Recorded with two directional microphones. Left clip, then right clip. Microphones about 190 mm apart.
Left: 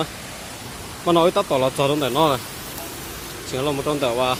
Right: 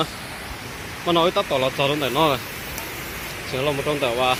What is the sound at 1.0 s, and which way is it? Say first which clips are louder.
Speech: left 2 dB; 30° left (ahead or behind).